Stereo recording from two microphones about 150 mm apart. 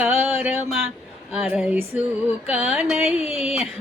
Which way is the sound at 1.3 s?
5° right (ahead or behind).